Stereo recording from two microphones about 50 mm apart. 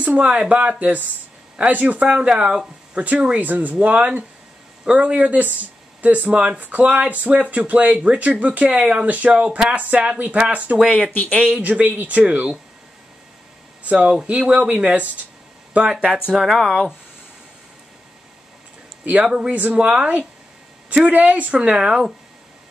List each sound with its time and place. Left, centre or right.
0.1 s speech: right
11.1 s speech: left
11.4 s speech: right
13.8 s speech: right
16.3 s speech: centre
19.2 s speech: centre
19.5 s speech: right
21.5 s speech: centre